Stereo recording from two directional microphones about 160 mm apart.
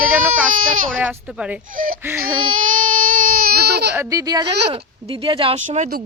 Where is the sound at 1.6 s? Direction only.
60° right (ahead or behind).